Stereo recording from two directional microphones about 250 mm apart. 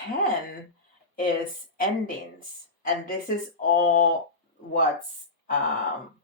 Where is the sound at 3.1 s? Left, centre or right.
Left.